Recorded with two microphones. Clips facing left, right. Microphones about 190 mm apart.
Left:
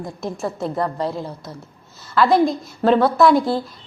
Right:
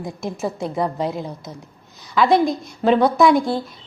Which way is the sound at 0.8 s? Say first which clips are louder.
Even; 20° right (ahead or behind).